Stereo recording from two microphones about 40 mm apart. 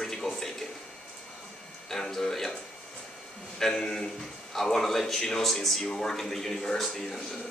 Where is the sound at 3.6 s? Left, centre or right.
Centre.